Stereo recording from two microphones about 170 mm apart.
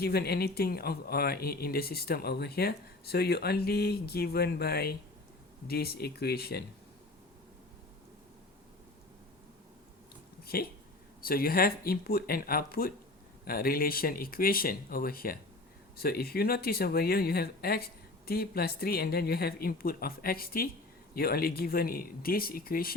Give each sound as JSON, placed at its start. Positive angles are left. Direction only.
{"t": 0.0, "sound": "speech", "side_deg": 70}
{"t": 10.4, "sound": "speech", "side_deg": 65}